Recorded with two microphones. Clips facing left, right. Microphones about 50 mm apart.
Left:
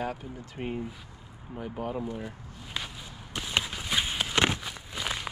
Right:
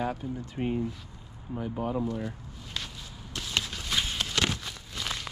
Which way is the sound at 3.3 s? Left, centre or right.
Centre.